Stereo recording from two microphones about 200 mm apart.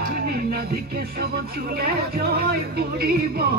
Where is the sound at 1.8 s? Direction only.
50° right (ahead or behind).